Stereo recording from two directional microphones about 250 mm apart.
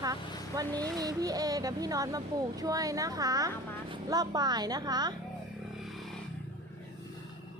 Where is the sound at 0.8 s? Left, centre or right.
Centre.